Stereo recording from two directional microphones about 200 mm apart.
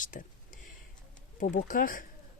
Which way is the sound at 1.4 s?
40° left (ahead or behind).